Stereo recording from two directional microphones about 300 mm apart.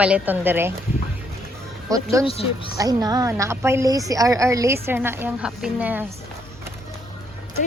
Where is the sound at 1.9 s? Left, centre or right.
Centre.